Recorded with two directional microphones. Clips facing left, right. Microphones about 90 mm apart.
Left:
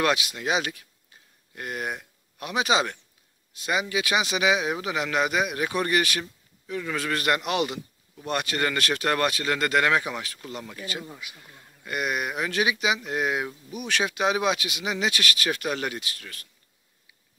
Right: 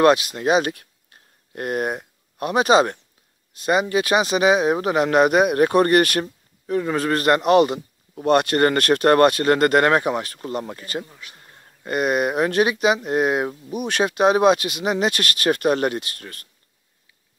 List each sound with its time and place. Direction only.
0.0 s speech: 40° right (ahead or behind)
6.7 s speech: 40° right (ahead or behind)
11.1 s a man's voice: 10° left (ahead or behind)
11.3 s speech: 40° right (ahead or behind)